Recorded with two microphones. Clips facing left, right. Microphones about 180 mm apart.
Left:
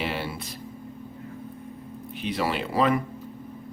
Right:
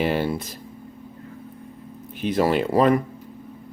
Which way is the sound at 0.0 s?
45° right (ahead or behind).